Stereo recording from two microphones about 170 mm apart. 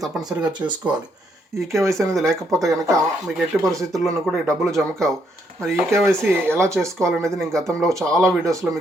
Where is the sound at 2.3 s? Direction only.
Centre (ahead or behind).